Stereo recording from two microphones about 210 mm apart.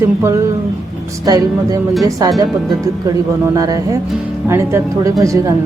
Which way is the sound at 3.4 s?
15° right (ahead or behind).